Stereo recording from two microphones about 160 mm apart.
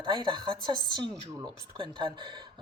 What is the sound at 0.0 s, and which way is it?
Speech, 30° right (ahead or behind).